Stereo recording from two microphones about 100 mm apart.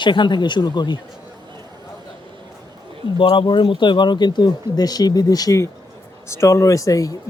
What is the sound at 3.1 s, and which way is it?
Speech, 55° left (ahead or behind).